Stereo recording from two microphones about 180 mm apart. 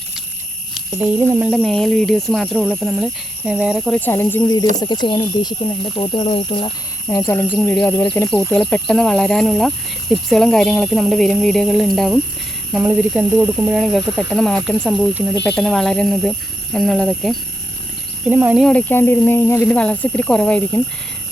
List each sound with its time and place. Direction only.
0.9 s speech: 10° right (ahead or behind)
4.0 s speech: 10° left (ahead or behind); by 6.7 s 30° left (ahead or behind)
7.1 s speech: 15° left (ahead or behind)
18.3 s speech: 10° right (ahead or behind)
18.6 s speech: 5° left (ahead or behind)